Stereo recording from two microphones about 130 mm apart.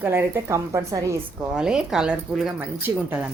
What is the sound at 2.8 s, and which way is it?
Speech, 15° right (ahead or behind).